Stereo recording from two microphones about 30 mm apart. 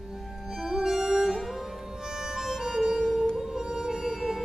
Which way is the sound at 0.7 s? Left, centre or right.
Centre.